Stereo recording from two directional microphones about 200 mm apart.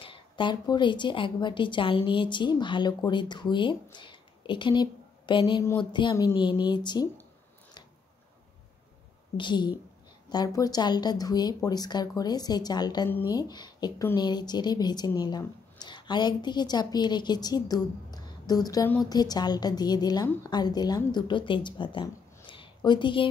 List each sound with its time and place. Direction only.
0.0 s a woman's voice: 25° left (ahead or behind)
9.4 s a woman's voice: 20° left (ahead or behind)